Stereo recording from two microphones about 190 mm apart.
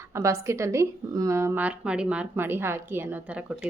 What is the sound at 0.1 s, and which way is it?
A woman's voice, 15° right (ahead or behind).